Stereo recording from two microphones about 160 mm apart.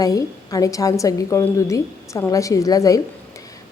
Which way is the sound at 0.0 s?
20° left (ahead or behind).